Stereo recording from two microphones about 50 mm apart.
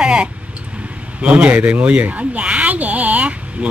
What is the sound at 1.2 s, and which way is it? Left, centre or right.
Speech, right.